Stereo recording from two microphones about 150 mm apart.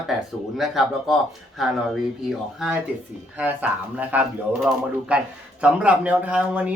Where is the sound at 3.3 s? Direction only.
10° right (ahead or behind).